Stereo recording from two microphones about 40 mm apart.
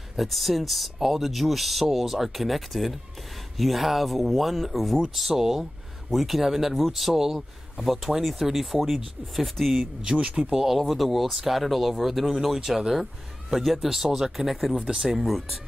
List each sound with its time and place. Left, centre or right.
0.1 s speech: centre
10.4 s speech: centre
10.8 s speech: centre